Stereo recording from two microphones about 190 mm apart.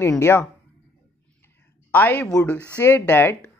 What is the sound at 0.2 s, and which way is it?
Speech, 10° left (ahead or behind).